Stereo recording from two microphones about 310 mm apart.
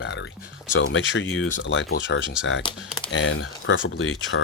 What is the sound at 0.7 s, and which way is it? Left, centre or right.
Speech, left.